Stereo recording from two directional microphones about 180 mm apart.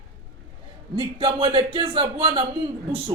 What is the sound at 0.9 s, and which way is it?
Speech, 30° right (ahead or behind).